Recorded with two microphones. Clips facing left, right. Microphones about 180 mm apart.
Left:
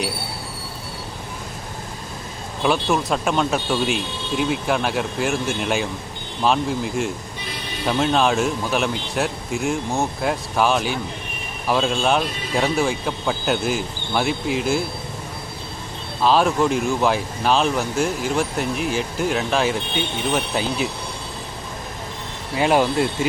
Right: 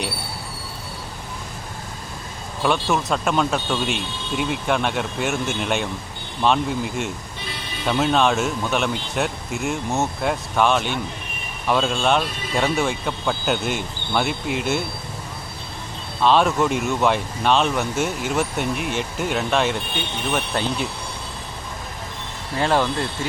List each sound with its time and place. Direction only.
2.9 s speech: centre (ahead or behind)
16.2 s speech: 5° left (ahead or behind)
22.5 s speech: 15° left (ahead or behind)